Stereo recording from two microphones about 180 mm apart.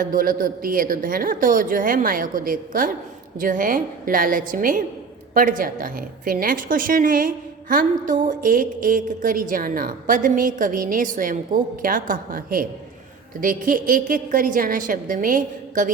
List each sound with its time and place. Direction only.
0.0 s a woman's voice: 50° right (ahead or behind)